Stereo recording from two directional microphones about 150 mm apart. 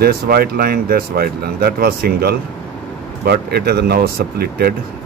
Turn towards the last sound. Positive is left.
turn(degrees=-90)